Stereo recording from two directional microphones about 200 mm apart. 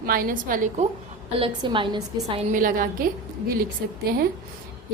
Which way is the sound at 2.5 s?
45° right (ahead or behind).